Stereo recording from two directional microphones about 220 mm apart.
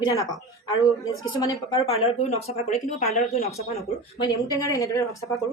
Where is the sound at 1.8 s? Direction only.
30° left (ahead or behind).